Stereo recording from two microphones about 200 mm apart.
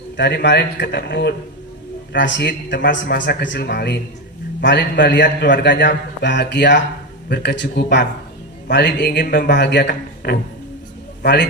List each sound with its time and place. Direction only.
0.2 s a man's voice: 60° left (ahead or behind)